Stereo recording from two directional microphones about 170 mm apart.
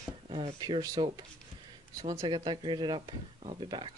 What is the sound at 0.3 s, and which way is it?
Speech, 30° right (ahead or behind).